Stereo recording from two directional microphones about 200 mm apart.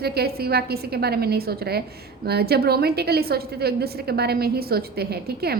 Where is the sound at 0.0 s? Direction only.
50° right (ahead or behind).